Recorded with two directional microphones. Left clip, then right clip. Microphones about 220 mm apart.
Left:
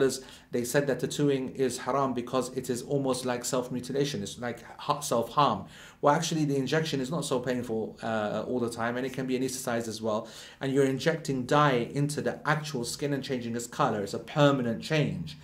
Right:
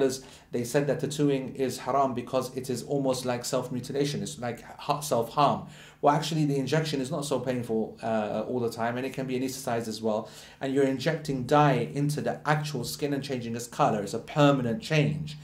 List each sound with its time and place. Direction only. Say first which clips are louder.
0.0 s speech: even; 25° left (ahead or behind)
6.0 s speech: right 1 dB; 35° left (ahead or behind)